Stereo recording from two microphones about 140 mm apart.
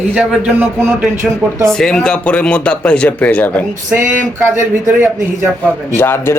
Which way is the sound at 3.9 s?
15° right (ahead or behind).